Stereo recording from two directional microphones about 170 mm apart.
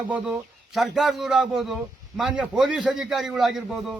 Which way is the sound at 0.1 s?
Centre (ahead or behind).